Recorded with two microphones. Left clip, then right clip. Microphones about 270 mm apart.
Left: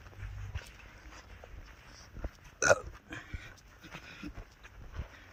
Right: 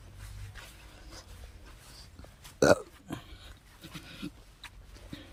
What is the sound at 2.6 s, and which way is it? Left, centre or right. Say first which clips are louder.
Burping: right 3 dB; right.